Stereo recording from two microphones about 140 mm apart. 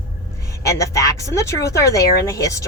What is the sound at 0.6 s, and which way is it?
Speech, 20° left (ahead or behind).